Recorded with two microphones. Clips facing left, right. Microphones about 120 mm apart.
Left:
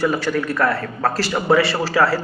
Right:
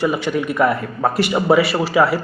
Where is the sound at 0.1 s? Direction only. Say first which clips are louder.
Right 1 dB; 10° right (ahead or behind).